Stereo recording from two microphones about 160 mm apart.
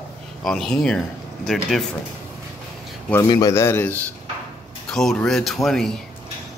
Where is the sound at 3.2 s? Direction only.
20° left (ahead or behind); by 5.9 s centre (ahead or behind).